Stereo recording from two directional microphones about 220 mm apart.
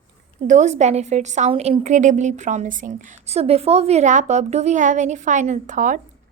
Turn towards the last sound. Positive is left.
turn(degrees=-35)  # may be behind; listen again after turning